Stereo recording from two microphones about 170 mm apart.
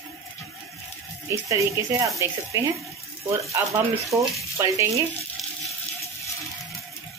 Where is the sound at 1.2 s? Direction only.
15° right (ahead or behind).